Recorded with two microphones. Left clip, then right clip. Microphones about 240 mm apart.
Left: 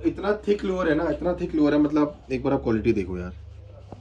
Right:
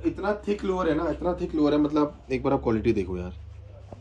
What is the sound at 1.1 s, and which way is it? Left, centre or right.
Speech, centre.